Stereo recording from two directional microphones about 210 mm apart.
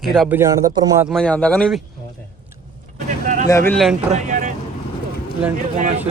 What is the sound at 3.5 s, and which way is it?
Speech, 15° left (ahead or behind).